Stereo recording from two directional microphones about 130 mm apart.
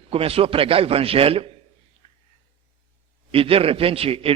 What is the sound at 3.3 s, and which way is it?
A man's voice, 45° right (ahead or behind).